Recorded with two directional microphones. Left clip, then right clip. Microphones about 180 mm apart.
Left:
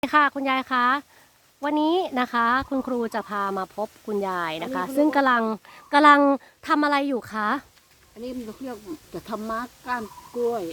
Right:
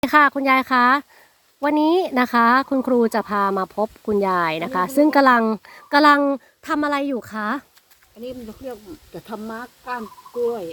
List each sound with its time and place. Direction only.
0.0 s a woman's voice: 20° right (ahead or behind); by 7.6 s centre (ahead or behind)
8.2 s speech: 25° left (ahead or behind)